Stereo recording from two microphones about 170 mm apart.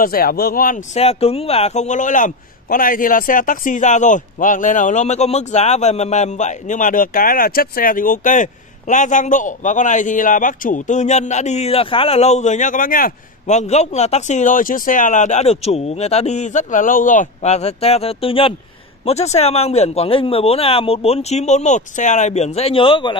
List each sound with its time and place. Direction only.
0.0 s speech: 60° left (ahead or behind); by 23.1 s 30° left (ahead or behind)